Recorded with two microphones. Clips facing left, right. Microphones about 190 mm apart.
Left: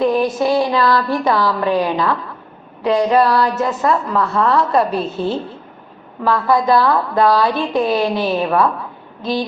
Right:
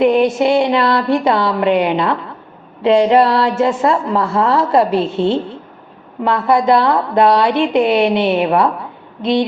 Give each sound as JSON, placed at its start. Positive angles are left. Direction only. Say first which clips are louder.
{"t": 0.0, "sound": "a woman's voice", "louder": "right 4 dB", "side_deg": -25}